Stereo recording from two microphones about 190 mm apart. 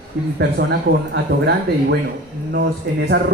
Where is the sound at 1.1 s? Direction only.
65° right (ahead or behind).